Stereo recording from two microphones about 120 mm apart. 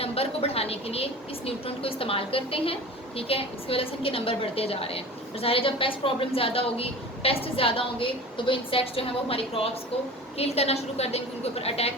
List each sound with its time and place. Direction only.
0.0 s a woman's voice: 55° left (ahead or behind)